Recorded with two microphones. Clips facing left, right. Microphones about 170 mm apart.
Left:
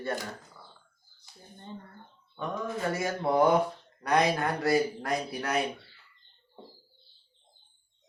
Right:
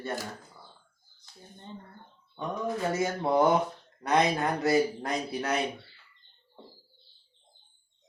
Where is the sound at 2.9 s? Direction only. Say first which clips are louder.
Even; 20° right (ahead or behind).